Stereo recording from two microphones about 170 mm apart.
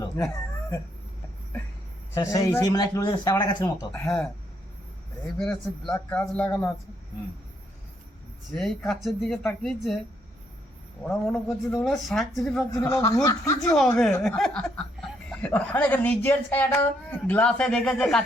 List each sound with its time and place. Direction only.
2.1 s a man's voice: 20° left (ahead or behind)
5.2 s speech: 5° left (ahead or behind)
8.5 s speech: centre (ahead or behind)
11.1 s speech: centre (ahead or behind)
12.7 s speech: 20° left (ahead or behind)
13.6 s speech: 5° left (ahead or behind)